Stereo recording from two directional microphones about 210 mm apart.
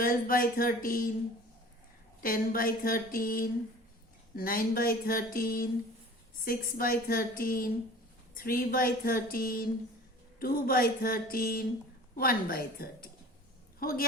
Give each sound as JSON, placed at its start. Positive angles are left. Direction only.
{"t": 0.0, "sound": "speech", "side_deg": 45}
{"t": 2.2, "sound": "a woman's voice", "side_deg": 45}